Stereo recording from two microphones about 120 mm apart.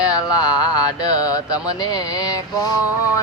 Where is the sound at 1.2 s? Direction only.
30° left (ahead or behind).